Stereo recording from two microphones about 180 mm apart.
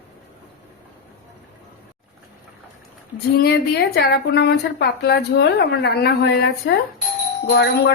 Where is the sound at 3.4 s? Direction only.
60° left (ahead or behind).